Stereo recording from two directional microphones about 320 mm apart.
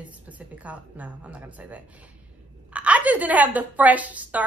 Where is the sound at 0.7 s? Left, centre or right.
Centre.